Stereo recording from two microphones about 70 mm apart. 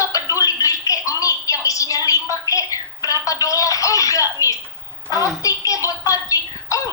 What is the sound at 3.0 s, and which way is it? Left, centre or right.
Telephone, left.